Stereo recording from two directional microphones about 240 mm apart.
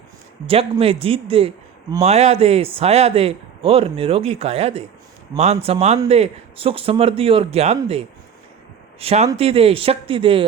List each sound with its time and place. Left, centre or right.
0.4 s speech: right